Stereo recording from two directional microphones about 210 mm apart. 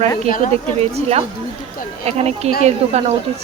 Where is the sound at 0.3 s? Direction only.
40° left (ahead or behind).